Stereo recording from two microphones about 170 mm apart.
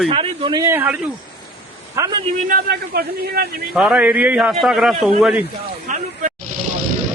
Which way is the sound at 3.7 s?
5° right (ahead or behind).